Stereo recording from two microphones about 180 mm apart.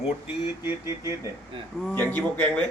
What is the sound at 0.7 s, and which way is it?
Music, 15° right (ahead or behind).